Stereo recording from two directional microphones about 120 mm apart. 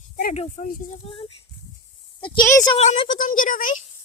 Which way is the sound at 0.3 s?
90° left.